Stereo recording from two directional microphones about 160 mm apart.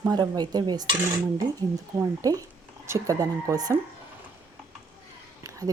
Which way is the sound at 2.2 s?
20° right (ahead or behind).